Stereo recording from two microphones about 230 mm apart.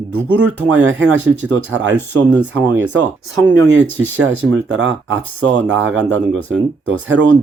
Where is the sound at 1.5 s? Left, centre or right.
Right.